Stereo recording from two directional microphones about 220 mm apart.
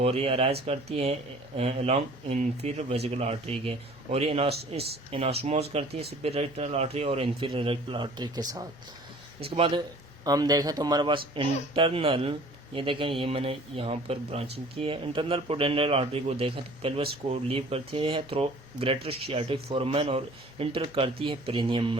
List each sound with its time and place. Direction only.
0.0 s speech: 25° right (ahead or behind)